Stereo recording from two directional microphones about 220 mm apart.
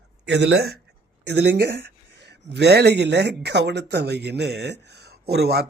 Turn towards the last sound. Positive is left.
turn(degrees=-45)  # may be behind; listen again after turning